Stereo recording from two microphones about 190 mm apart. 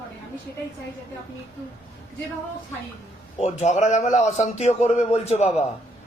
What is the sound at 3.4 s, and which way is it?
A man's voice, 35° left (ahead or behind).